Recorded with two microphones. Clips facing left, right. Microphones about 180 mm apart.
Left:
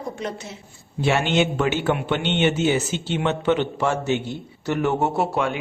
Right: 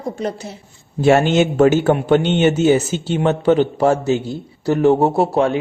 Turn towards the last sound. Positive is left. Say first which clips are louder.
# right 7 dB
turn(degrees=-35)  # may be behind; listen again after turning